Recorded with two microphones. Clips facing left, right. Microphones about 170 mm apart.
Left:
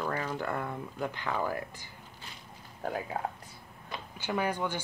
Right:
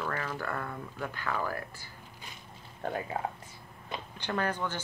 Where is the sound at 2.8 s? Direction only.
Centre (ahead or behind).